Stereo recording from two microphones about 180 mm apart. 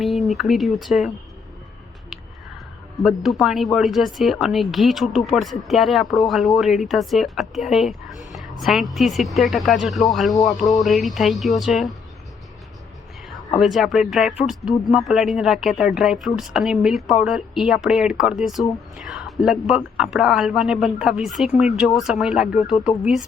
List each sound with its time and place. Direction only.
0.0 s speech: centre (ahead or behind)
3.0 s speech: centre (ahead or behind)
13.6 s speech: centre (ahead or behind)